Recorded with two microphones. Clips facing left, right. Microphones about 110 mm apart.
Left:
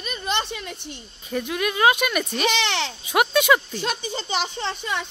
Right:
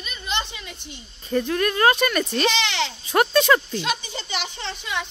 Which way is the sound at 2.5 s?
55° left (ahead or behind).